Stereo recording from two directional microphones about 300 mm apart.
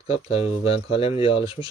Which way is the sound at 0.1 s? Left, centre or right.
Centre.